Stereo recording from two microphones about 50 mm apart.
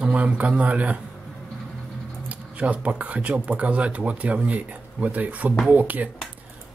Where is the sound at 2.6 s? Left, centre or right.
Right.